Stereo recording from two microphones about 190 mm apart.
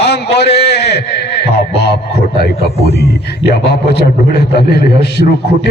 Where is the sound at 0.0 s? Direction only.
60° left (ahead or behind).